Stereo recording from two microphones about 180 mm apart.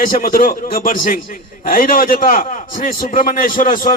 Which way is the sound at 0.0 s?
50° left (ahead or behind).